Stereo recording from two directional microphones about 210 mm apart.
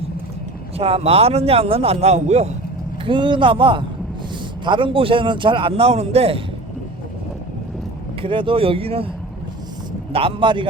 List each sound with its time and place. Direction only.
0.8 s a man's voice: 30° right (ahead or behind)
8.2 s a man's voice: 25° right (ahead or behind)
10.1 s a man's voice: 25° right (ahead or behind)